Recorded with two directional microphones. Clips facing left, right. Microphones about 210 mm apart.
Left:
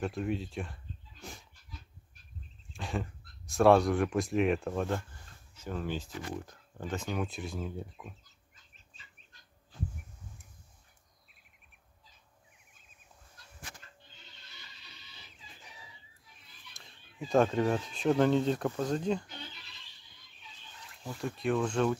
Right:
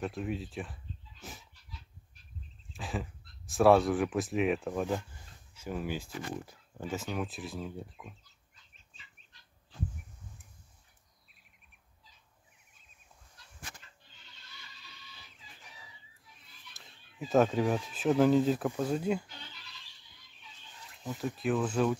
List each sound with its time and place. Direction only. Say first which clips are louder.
0.0 s speech: left 2 dB; centre (ahead or behind)
1.5 s dog: left 1 dB; 50° left (ahead or behind)
2.7 s speech: left 1 dB; centre (ahead or behind)
16.8 s a sound: left 1 dB; 5° right (ahead or behind)
17.3 s speech: even; 5° right (ahead or behind)
21.4 s speech: even; 5° right (ahead or behind)